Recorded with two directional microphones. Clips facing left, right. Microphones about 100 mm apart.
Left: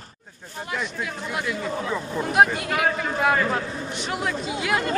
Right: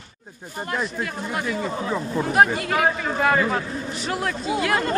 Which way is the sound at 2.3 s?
Centre (ahead or behind).